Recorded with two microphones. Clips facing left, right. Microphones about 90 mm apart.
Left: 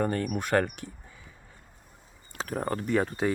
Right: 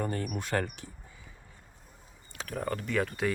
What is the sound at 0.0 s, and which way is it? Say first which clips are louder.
Speech: left 5 dB; 55° left (ahead or behind).